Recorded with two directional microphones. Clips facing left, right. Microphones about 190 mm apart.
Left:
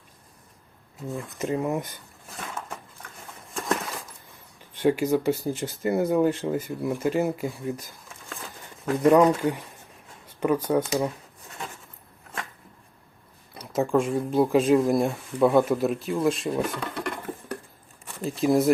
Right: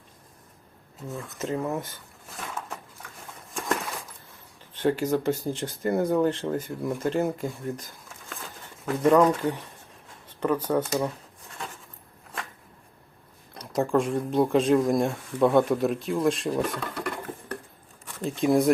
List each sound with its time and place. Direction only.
1.0 s speech: 15° left (ahead or behind)
4.7 s speech: 10° left (ahead or behind)
9.0 s speech: 10° left (ahead or behind)
13.5 s speech: 5° left (ahead or behind)
18.2 s speech: centre (ahead or behind)